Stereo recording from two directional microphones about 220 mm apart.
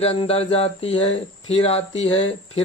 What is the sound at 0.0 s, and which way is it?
Speech, 25° left (ahead or behind).